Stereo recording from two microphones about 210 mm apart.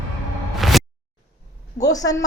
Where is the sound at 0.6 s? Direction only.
Centre (ahead or behind).